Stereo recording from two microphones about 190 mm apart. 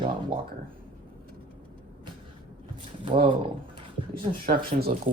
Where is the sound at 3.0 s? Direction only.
30° right (ahead or behind).